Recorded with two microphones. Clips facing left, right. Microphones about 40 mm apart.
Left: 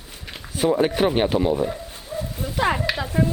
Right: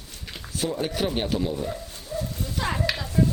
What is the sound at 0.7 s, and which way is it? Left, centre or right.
Speech, left.